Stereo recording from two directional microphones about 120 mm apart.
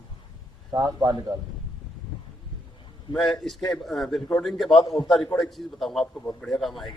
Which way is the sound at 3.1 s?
5° left (ahead or behind).